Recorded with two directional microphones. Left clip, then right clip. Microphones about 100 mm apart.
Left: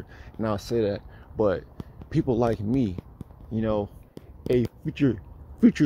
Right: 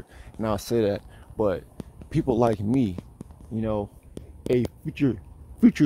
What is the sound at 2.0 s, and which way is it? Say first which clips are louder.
Speech: even; 40° right (ahead or behind).